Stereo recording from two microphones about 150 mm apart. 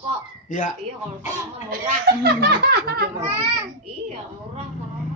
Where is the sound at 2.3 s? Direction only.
90° right.